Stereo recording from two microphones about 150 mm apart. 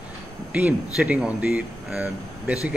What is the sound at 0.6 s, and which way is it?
Speech, 5° right (ahead or behind).